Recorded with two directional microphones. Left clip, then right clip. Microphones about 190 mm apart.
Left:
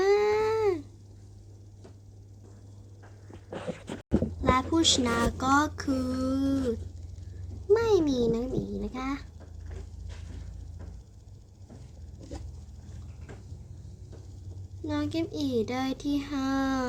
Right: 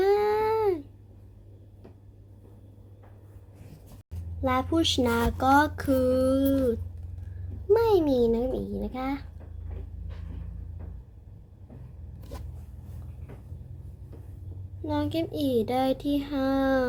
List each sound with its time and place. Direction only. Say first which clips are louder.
0.0 s a sound: right 1 dB; centre (ahead or behind)
4.4 s child singing: even; 10° left (ahead or behind)
7.7 s child singing: right 2 dB; 5° left (ahead or behind)
14.8 s a child's voice: right 2 dB; 5° left (ahead or behind)